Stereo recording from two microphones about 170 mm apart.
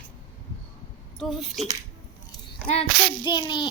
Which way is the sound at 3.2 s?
25° left (ahead or behind).